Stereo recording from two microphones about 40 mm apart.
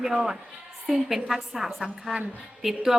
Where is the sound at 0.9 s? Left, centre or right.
Centre.